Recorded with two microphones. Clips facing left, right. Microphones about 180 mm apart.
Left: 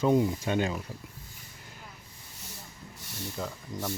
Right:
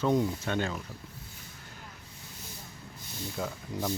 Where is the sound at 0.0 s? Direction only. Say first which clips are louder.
Left 3 dB; 10° left (ahead or behind).